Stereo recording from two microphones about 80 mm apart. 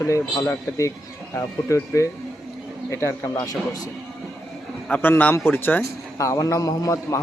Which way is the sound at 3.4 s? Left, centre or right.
Left.